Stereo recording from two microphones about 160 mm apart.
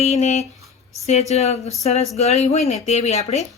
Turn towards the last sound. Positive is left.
turn(degrees=45)  # may be behind; listen again after turning